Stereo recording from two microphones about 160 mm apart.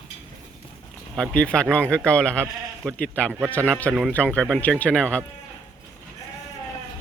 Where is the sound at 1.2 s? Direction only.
5° left (ahead or behind).